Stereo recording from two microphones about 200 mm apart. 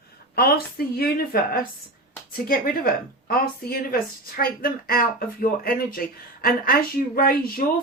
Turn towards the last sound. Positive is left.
turn(degrees=45)  # may be behind; listen again after turning